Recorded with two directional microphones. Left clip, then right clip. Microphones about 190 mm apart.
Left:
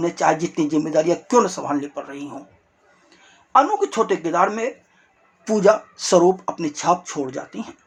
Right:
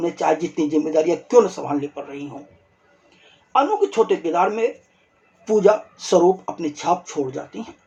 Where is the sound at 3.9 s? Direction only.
25° left (ahead or behind).